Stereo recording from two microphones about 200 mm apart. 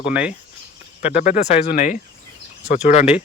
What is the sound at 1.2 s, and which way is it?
Speech, 35° left (ahead or behind).